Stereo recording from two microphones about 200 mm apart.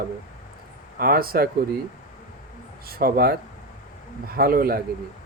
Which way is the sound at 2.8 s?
50° right (ahead or behind).